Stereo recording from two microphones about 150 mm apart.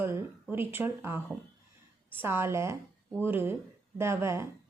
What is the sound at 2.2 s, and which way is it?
Speech, 15° right (ahead or behind).